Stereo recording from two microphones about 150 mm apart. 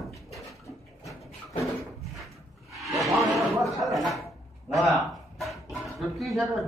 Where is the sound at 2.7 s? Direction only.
Centre (ahead or behind).